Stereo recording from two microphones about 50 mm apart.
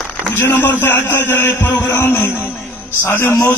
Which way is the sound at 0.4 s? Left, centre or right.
Left.